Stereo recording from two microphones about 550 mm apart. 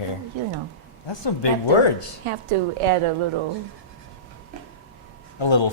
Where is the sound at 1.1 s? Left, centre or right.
Left.